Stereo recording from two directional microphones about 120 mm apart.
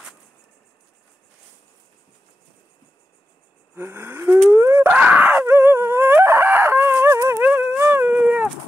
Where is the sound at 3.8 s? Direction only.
20° right (ahead or behind).